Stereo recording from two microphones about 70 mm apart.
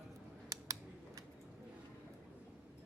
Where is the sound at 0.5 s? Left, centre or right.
Right.